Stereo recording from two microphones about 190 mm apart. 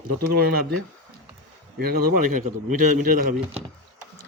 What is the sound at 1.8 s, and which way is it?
Speech, 50° right (ahead or behind).